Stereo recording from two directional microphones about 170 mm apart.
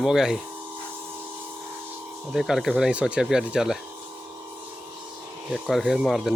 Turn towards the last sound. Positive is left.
turn(degrees=0)  # may be behind; listen again after turning